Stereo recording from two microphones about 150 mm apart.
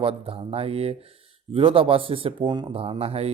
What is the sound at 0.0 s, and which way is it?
Speech, 40° right (ahead or behind).